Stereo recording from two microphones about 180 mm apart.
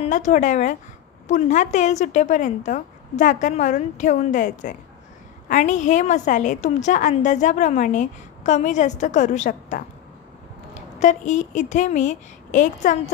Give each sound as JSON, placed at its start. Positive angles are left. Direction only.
{"t": 0.0, "sound": "a woman's voice", "side_deg": 40}